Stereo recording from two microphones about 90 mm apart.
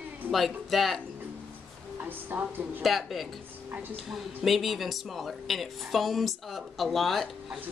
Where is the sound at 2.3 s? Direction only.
20° right (ahead or behind).